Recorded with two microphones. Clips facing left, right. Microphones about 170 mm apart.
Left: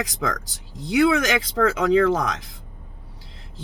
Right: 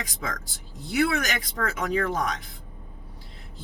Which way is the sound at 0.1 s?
90° left.